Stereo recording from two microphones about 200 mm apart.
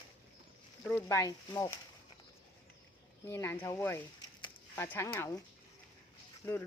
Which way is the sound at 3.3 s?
10° left (ahead or behind).